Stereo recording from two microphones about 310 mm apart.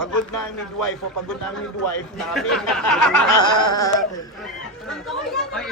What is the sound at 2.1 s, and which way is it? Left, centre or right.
Speech, centre.